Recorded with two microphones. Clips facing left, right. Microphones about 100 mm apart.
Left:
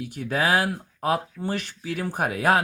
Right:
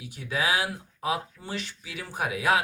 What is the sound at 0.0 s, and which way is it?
Speech, 50° left (ahead or behind).